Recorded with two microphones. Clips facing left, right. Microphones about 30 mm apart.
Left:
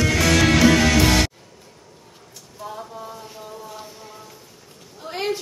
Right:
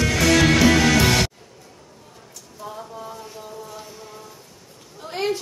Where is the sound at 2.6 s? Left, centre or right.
Centre.